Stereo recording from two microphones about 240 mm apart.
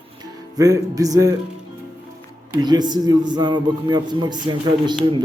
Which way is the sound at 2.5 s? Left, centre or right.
Centre.